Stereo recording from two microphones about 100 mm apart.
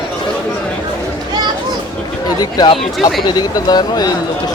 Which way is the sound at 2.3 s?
40° left (ahead or behind).